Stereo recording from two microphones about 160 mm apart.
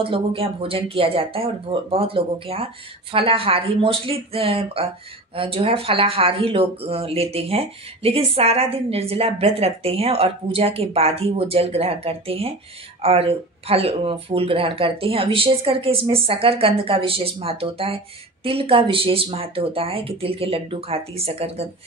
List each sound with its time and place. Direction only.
0.0 s speech: 35° right (ahead or behind)